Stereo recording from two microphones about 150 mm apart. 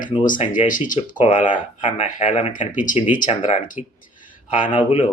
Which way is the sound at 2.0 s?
45° left (ahead or behind).